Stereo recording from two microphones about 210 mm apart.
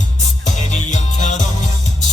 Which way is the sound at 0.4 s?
35° left (ahead or behind).